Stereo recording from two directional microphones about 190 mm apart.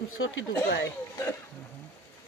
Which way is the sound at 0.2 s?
90° left.